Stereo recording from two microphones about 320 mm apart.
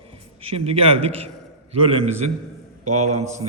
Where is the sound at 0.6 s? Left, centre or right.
Centre.